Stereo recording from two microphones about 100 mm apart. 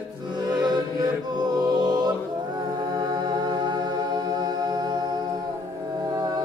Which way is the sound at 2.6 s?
45° right (ahead or behind).